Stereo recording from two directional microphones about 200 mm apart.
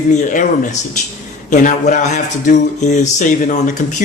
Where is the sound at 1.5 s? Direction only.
40° left (ahead or behind).